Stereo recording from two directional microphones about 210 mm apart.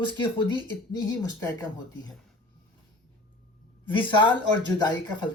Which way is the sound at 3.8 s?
25° left (ahead or behind).